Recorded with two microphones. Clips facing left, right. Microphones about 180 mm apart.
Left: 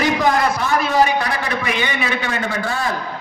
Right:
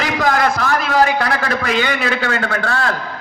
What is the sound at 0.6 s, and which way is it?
A man's voice, 90° right.